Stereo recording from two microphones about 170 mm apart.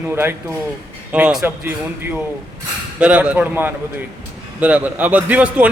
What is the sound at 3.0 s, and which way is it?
A man's voice, 5° right (ahead or behind).